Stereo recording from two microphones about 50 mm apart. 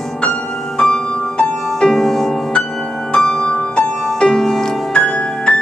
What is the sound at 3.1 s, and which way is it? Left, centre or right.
Music, centre.